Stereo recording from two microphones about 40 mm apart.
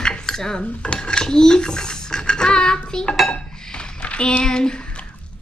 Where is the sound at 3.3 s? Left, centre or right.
Left.